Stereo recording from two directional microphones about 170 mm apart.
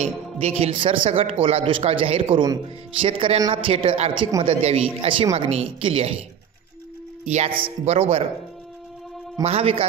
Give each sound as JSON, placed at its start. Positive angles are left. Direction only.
{"t": 0.0, "sound": "speech", "side_deg": -35}
{"t": 7.2, "sound": "speech", "side_deg": -35}
{"t": 9.4, "sound": "speech", "side_deg": -35}